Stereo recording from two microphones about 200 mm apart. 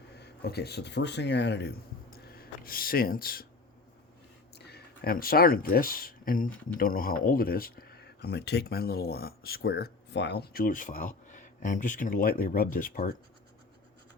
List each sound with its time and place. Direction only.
0.1 s speech: 55° left (ahead or behind)
4.5 s speech: 55° left (ahead or behind)